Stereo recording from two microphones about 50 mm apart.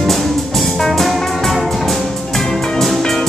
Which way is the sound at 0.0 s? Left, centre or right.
Centre.